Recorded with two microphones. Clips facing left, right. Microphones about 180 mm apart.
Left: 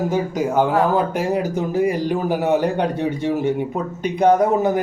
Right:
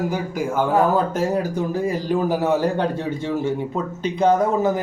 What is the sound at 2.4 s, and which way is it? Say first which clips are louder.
A man's voice: left 1 dB; 20° left (ahead or behind).